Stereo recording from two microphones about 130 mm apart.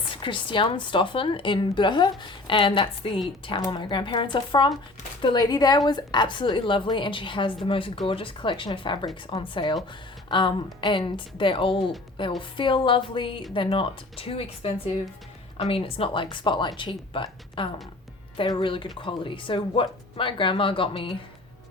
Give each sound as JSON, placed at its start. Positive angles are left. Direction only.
{"t": 0.2, "sound": "a woman's voice", "side_deg": 40}